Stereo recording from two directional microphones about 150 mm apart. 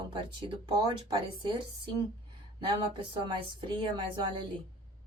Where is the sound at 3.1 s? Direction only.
35° right (ahead or behind).